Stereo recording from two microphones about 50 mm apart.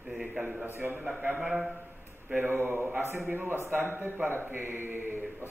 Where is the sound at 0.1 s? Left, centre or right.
Centre.